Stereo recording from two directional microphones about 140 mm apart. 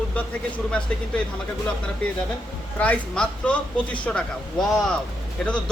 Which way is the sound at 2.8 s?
10° left (ahead or behind).